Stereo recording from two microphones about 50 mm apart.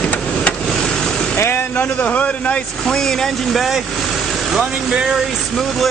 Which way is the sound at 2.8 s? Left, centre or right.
Centre.